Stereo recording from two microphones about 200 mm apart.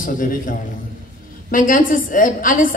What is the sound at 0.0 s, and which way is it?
A woman's voice, 45° left (ahead or behind).